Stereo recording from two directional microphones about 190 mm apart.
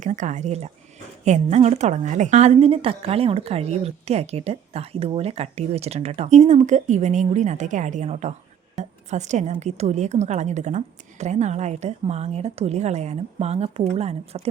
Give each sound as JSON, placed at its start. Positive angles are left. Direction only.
{"t": 0.0, "sound": "a woman's voice", "side_deg": -40}